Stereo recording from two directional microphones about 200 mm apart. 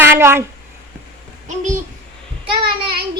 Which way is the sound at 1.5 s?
35° right (ahead or behind).